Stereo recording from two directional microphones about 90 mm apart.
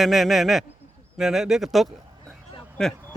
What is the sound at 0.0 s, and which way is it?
Speech, centre (ahead or behind).